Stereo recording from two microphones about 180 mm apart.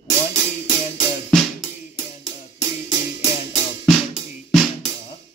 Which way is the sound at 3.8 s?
Centre (ahead or behind).